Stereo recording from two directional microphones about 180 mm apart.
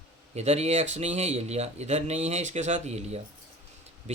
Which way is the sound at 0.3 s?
35° right (ahead or behind).